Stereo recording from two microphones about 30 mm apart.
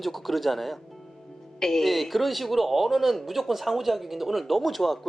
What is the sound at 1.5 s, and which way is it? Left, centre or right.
Speech, centre.